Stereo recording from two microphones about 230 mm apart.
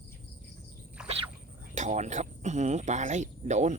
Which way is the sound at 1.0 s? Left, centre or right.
Centre.